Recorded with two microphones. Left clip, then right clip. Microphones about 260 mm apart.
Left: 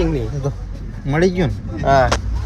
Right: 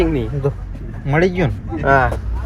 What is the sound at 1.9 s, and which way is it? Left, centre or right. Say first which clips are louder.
Speech: left 1 dB; right.